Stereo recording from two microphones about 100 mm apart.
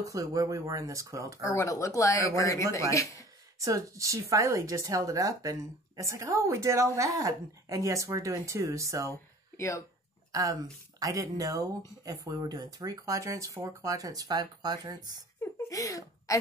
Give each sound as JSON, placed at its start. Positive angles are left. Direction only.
{"t": 0.0, "sound": "speech", "side_deg": -35}
{"t": 1.4, "sound": "speech", "side_deg": 30}
{"t": 3.5, "sound": "speech", "side_deg": -35}
{"t": 9.6, "sound": "speech", "side_deg": 30}
{"t": 11.0, "sound": "speech", "side_deg": -35}
{"t": 15.7, "sound": "speech", "side_deg": 35}